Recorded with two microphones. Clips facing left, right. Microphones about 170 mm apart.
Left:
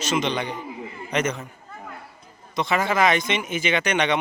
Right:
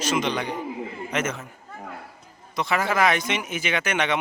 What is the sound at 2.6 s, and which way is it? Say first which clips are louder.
Speech: left 1 dB; 5° right (ahead or behind).